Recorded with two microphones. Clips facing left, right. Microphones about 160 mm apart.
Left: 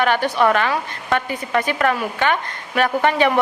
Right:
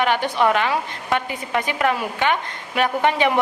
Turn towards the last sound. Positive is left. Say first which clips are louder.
# left 2 dB
turn(degrees=-15)  # may be behind; listen again after turning